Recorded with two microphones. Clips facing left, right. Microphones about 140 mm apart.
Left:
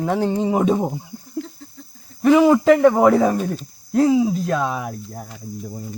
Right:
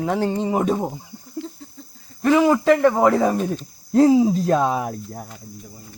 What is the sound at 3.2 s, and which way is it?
Speech, 5° right (ahead or behind).